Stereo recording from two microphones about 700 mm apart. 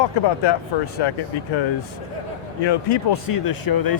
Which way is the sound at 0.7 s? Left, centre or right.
Left.